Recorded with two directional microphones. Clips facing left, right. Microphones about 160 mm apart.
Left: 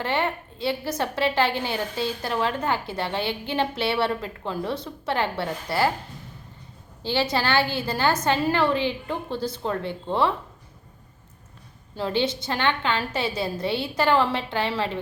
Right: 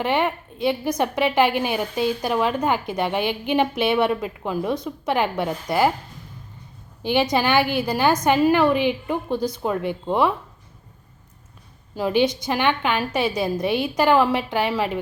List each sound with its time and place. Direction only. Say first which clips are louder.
0.0 s a woman's voice: right 4 dB; 15° right (ahead or behind)
7.0 s a woman's voice: right 4 dB; 15° right (ahead or behind)
11.9 s a woman's voice: right 5 dB; 15° right (ahead or behind)